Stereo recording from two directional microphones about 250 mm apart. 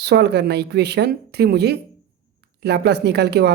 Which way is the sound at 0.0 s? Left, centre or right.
Right.